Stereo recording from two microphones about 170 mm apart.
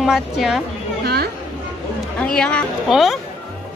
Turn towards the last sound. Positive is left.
turn(degrees=0)  # may be behind; listen again after turning